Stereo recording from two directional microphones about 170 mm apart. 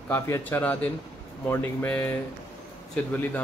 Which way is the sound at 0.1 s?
10° left (ahead or behind).